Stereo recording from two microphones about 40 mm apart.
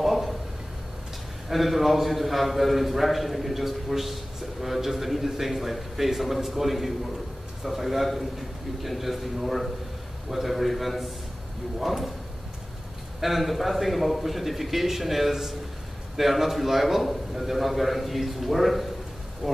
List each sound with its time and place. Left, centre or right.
0.0 s a sound: centre
1.5 s a man's voice: centre
13.2 s a man's voice: centre
19.4 s speech: centre